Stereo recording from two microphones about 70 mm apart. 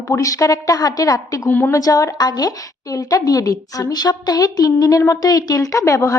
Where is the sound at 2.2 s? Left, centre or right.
Left.